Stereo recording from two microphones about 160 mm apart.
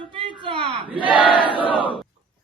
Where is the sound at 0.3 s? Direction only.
30° right (ahead or behind).